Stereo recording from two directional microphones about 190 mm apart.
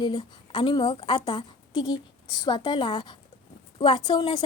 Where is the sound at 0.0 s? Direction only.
25° left (ahead or behind).